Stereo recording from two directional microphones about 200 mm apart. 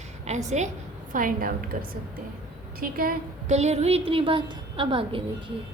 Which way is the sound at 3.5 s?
35° right (ahead or behind).